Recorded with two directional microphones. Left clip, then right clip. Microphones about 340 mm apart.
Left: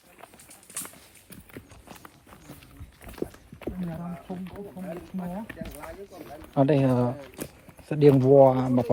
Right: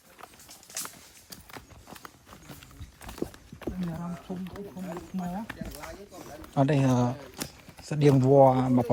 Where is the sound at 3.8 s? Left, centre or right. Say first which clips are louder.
Left 1 dB; centre.